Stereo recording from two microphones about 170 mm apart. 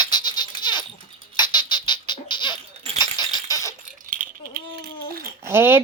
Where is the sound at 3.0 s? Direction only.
25° left (ahead or behind).